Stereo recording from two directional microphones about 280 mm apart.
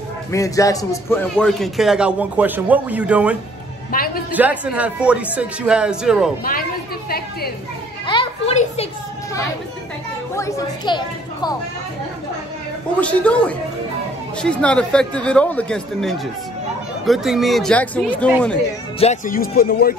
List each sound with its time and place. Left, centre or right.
0.3 s a man's voice: centre
3.9 s a woman's voice: left
4.3 s a man's voice: centre
7.1 s speech: left
8.1 s children playing: centre
10.3 s a woman's voice: centre
13.0 s a man's voice: centre
18.9 s speech: left